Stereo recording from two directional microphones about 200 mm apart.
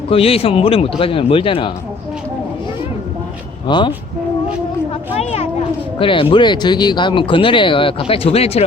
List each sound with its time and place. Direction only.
0.1 s speech: 30° left (ahead or behind)
3.7 s speech: 20° left (ahead or behind)
5.1 s a sound: 30° left (ahead or behind)
6.0 s speech: 25° left (ahead or behind)